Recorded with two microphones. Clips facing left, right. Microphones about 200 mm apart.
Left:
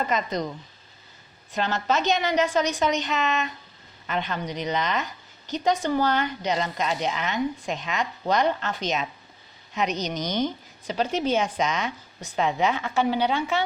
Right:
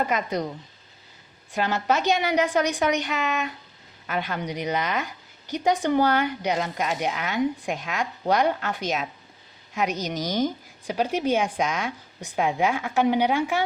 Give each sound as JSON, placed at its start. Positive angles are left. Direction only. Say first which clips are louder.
{"t": 0.1, "sound": "speech", "louder": "even", "side_deg": -10}
{"t": 1.5, "sound": "speech", "louder": "right 1 dB", "side_deg": -10}
{"t": 10.2, "sound": "a woman's voice", "louder": "right 2 dB", "side_deg": -45}
{"t": 10.8, "sound": "speech", "louder": "right 1 dB", "side_deg": -10}